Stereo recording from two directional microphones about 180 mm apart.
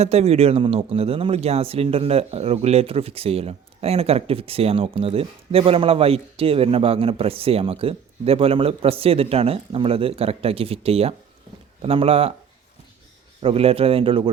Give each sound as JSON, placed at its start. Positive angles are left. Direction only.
{"t": 0.0, "sound": "speech", "side_deg": -35}
{"t": 13.4, "sound": "speech", "side_deg": -30}